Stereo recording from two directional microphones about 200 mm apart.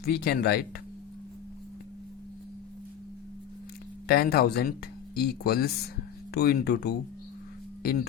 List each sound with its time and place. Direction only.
0.0 s speech: 50° left (ahead or behind)
4.1 s speech: 50° left (ahead or behind)